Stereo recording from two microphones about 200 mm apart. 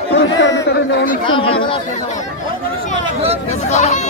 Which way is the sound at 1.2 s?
25° left (ahead or behind).